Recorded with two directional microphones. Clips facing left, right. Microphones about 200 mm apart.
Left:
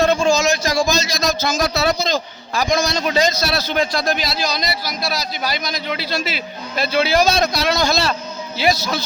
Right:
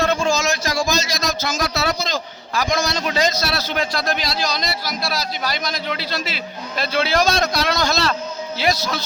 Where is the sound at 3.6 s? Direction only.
15° left (ahead or behind).